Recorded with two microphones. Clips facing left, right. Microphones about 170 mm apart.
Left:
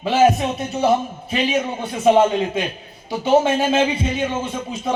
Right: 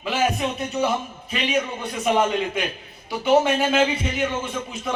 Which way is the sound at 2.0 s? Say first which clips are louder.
Left 6 dB; 25° left (ahead or behind).